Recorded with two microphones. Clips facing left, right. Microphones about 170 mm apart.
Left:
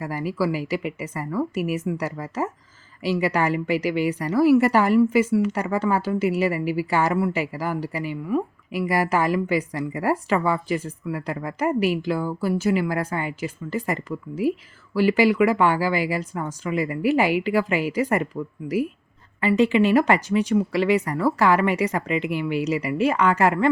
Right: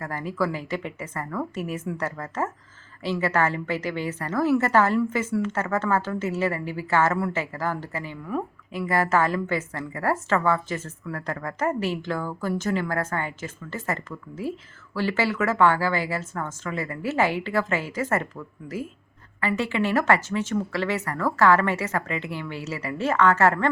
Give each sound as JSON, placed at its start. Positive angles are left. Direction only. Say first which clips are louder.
{"t": 0.0, "sound": "a woman's voice", "louder": "left 3 dB", "side_deg": 10}
{"t": 19.4, "sound": "a woman's voice", "louder": "left 7 dB", "side_deg": 15}